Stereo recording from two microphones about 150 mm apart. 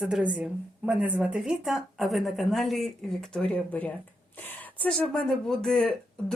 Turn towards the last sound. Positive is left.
turn(degrees=0)  # may be behind; listen again after turning